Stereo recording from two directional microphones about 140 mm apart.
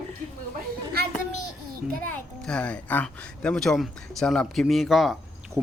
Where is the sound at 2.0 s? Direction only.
10° left (ahead or behind).